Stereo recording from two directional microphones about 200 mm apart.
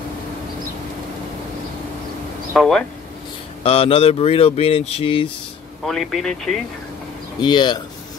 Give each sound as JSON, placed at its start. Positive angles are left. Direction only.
{"t": 2.5, "sound": "speech", "side_deg": 0}
{"t": 3.6, "sound": "speech", "side_deg": 30}
{"t": 5.9, "sound": "speech", "side_deg": 0}
{"t": 7.3, "sound": "speech", "side_deg": 20}